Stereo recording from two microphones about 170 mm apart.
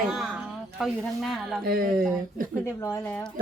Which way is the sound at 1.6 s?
60° right (ahead or behind).